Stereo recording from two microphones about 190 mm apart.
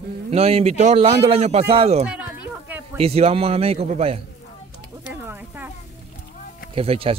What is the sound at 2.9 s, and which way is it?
Speech, 30° right (ahead or behind).